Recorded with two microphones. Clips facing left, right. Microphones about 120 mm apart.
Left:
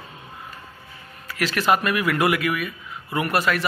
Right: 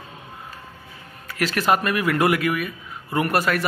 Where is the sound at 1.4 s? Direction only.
45° right (ahead or behind).